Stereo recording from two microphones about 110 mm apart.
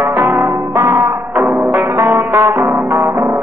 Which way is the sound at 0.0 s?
25° right (ahead or behind).